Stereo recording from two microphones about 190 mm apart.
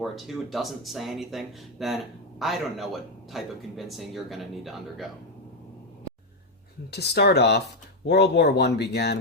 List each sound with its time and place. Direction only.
0.0 s a man's voice: centre (ahead or behind)
6.9 s speech: 60° left (ahead or behind)